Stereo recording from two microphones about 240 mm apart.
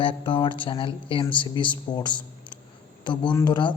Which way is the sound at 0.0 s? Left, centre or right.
Left.